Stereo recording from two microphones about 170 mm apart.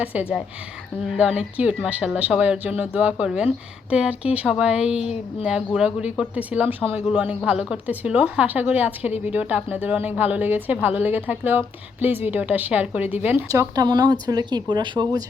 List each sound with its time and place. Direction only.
0.0 s a woman's voice: 10° right (ahead or behind); by 15.2 s 25° right (ahead or behind)